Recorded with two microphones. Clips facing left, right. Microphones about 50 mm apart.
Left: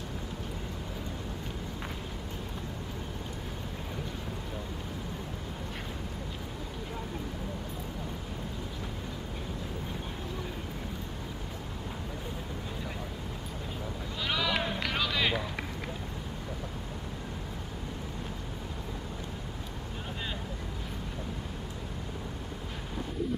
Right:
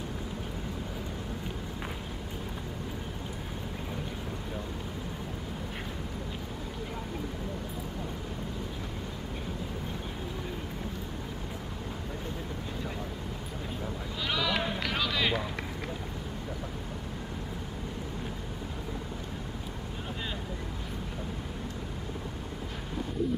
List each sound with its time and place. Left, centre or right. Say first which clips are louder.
14.2 s run: even; centre